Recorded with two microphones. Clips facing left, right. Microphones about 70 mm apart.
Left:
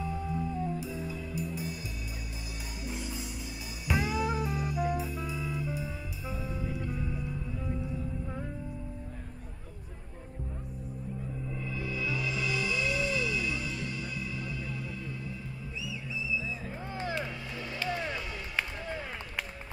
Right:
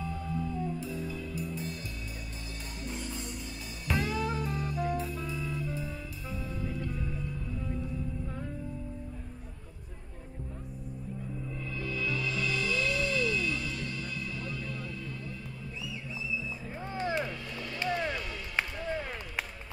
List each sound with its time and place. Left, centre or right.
0.0 s music: centre
2.8 s music: centre
11.5 s music: centre
15.8 s music: right
17.8 s music: centre
18.8 s a sound: centre